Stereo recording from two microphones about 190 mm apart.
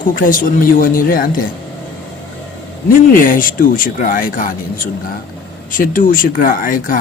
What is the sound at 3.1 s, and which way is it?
Speech, 45° left (ahead or behind).